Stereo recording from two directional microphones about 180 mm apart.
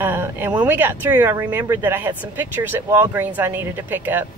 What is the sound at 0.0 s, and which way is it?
Speech, 10° right (ahead or behind).